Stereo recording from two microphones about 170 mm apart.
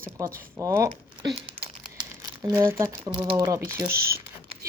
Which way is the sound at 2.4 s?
15° right (ahead or behind).